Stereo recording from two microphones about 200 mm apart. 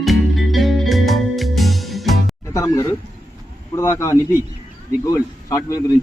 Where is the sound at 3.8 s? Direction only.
15° left (ahead or behind).